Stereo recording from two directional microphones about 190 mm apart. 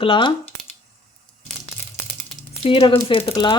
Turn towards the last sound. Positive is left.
turn(degrees=25)  # may be behind; listen again after turning